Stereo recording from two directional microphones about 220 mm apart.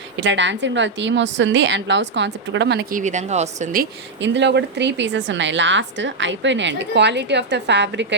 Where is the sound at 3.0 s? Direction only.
35° right (ahead or behind).